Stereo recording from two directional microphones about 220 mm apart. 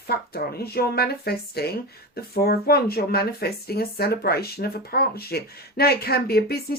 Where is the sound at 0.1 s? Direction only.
45° left (ahead or behind).